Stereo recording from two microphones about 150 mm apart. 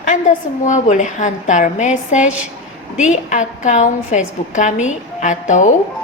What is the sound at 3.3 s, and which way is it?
A woman's voice, 55° left (ahead or behind).